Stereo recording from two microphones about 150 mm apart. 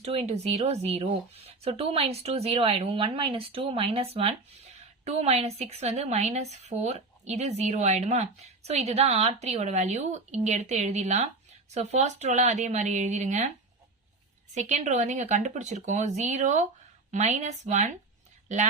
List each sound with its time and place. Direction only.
0.0 s a woman's voice: 45° right (ahead or behind)
14.5 s a woman's voice: 50° right (ahead or behind)